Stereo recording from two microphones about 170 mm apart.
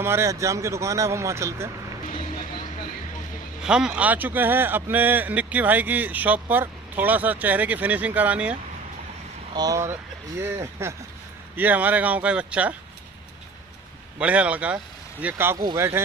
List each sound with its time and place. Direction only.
0.0 s a man's voice: 15° right (ahead or behind)
3.6 s a man's voice: 5° right (ahead or behind)
9.5 s a man's voice: 20° right (ahead or behind)
14.1 s a man's voice: 5° right (ahead or behind)
15.5 s speech: 25° right (ahead or behind)